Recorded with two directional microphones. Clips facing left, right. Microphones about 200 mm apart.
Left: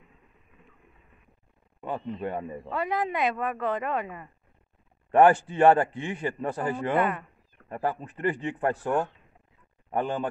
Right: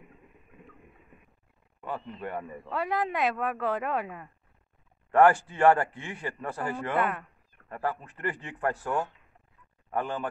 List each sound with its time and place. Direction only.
1.8 s a sound: 20° left (ahead or behind)
2.2 s speech: 20° left (ahead or behind)
2.7 s speech: centre (ahead or behind)
5.1 s a man's voice: 20° left (ahead or behind)
7.0 s speech: centre (ahead or behind)
7.6 s a man's voice: 20° left (ahead or behind)